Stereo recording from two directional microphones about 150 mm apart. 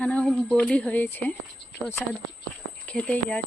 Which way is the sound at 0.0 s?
10° left (ahead or behind).